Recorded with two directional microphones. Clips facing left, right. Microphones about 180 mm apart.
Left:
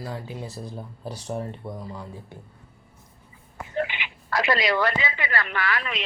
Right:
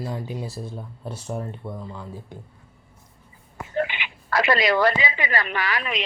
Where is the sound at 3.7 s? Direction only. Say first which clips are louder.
Right 2 dB; 65° right (ahead or behind).